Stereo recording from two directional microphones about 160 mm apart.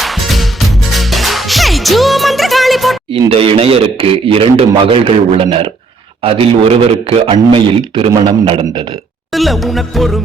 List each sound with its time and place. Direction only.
0.0 s music: centre (ahead or behind)
3.1 s a man's voice: 35° right (ahead or behind)
9.3 s music: centre (ahead or behind)